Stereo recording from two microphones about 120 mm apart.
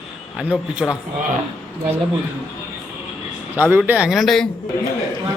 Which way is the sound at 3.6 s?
15° right (ahead or behind).